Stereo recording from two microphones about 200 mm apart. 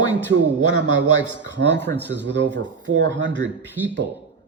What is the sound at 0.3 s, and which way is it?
Speech, 90° right.